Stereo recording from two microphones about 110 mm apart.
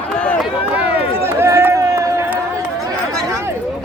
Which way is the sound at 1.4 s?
25° right (ahead or behind).